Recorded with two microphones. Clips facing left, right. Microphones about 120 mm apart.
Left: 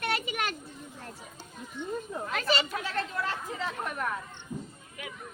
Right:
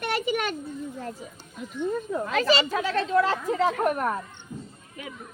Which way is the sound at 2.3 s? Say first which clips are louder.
Right 6 dB; 90° right.